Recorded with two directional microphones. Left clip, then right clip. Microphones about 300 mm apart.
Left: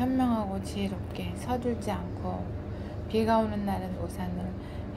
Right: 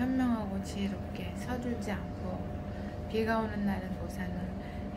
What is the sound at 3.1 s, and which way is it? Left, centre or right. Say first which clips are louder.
Speech: left 6 dB; centre.